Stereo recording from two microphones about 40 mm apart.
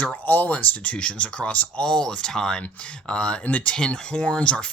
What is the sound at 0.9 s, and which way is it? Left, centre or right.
Speech, left.